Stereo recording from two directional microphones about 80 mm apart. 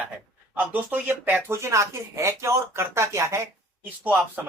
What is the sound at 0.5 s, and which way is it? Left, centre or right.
Speech, right.